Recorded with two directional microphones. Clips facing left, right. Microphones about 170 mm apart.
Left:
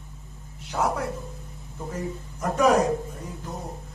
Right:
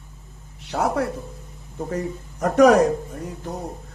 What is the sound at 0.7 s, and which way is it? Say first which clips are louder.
A man's voice: right 4 dB; 70° right (ahead or behind).